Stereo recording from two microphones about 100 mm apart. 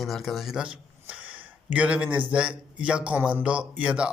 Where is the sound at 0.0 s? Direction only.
Centre (ahead or behind).